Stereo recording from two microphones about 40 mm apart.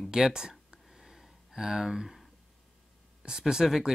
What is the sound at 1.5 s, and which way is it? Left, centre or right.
Speech, centre.